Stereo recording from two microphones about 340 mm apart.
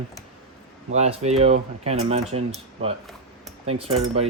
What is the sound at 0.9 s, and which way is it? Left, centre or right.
Speech, centre.